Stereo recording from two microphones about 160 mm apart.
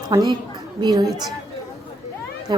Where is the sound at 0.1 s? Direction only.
25° right (ahead or behind).